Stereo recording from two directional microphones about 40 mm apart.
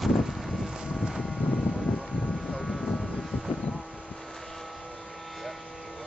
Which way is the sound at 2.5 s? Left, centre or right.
Centre.